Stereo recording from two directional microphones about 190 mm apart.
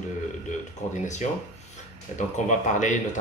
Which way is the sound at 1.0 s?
40° left (ahead or behind).